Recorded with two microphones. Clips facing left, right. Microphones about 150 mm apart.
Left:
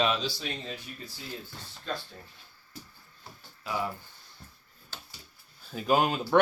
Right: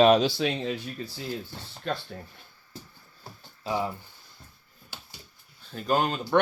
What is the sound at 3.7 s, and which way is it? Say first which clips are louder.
Speech: right 4 dB; 25° right (ahead or behind).